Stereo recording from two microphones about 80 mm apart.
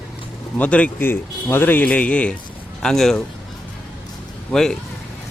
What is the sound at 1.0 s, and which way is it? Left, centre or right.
Speech, left.